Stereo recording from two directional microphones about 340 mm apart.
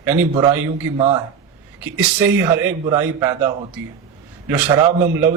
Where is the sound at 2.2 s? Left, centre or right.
Centre.